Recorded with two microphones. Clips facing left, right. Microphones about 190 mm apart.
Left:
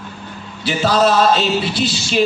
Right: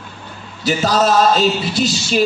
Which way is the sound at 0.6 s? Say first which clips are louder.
Even; 45° right (ahead or behind).